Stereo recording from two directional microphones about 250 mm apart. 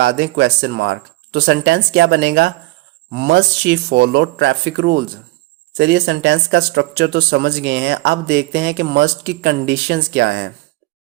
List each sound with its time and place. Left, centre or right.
0.0 s speech: right